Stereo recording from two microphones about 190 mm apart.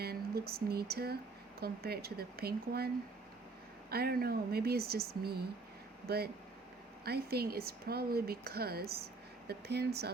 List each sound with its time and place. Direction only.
0.0 s speech: 55° right (ahead or behind)